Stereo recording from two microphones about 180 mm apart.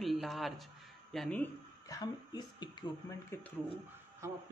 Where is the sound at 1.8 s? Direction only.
20° left (ahead or behind).